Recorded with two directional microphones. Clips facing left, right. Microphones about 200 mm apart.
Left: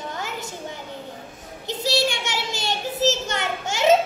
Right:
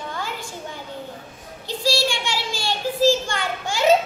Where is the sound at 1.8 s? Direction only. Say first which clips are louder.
Even; 20° left (ahead or behind).